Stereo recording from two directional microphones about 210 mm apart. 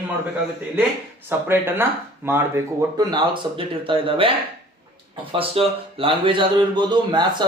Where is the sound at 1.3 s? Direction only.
10° right (ahead or behind).